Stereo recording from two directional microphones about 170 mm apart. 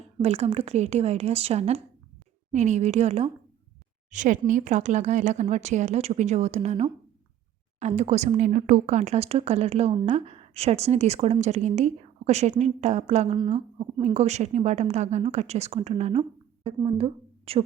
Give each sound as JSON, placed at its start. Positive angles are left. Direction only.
{"t": 0.2, "sound": "a woman's voice", "side_deg": -40}
{"t": 4.1, "sound": "a woman's voice", "side_deg": -50}